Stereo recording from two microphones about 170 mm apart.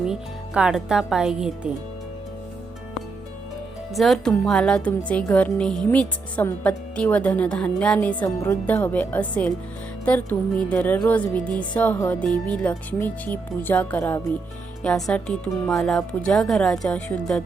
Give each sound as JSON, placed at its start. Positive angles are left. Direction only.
{"t": 0.1, "sound": "speech", "side_deg": -5}
{"t": 3.9, "sound": "a woman's voice", "side_deg": 0}